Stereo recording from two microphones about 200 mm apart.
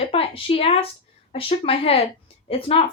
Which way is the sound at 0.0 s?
30° left (ahead or behind).